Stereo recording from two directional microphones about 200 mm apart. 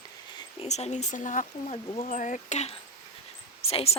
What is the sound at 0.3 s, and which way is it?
A woman's voice, 30° left (ahead or behind).